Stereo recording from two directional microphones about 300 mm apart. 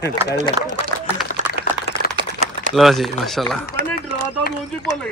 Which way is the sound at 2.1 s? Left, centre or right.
Right.